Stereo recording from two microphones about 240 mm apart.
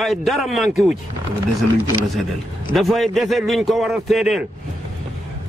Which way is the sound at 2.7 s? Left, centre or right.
Centre.